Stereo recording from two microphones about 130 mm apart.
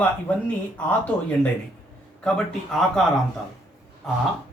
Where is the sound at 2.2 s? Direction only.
5° left (ahead or behind).